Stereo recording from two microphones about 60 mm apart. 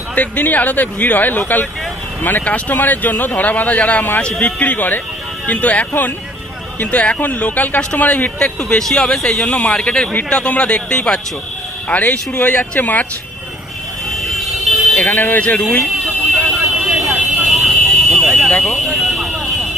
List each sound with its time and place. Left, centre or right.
0.1 s speech: left
8.4 s speech: centre
9.5 s speech: centre
11.9 s speech: left
14.1 s vehicle: centre
15.0 s speech: left
15.8 s a sound: centre
16.9 s vehicle: centre
18.5 s alarm: centre